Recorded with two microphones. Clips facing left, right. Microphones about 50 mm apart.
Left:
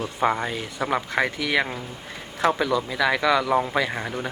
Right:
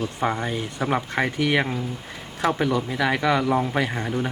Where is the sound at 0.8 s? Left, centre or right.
Left.